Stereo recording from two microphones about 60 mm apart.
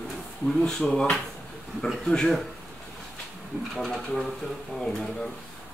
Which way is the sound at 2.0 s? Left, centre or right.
Centre.